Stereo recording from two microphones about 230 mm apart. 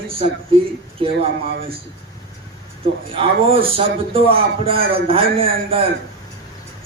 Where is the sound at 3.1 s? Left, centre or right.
Right.